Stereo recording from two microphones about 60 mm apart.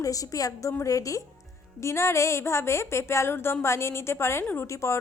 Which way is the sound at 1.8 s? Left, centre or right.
Left.